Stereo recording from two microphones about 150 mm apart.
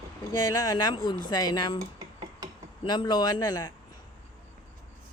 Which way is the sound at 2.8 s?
30° left (ahead or behind).